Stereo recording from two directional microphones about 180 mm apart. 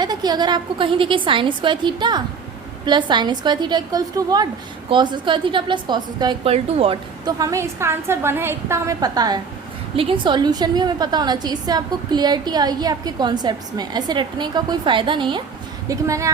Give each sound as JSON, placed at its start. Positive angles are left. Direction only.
{"t": 0.0, "sound": "a woman's voice", "side_deg": -20}